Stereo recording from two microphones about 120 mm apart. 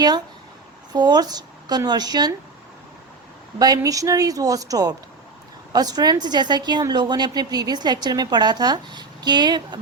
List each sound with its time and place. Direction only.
0.9 s a woman's voice: 35° right (ahead or behind)
3.6 s a woman's voice: 30° right (ahead or behind)